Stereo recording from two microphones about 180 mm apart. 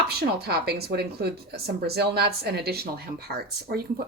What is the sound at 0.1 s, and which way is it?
Speech, 60° right (ahead or behind).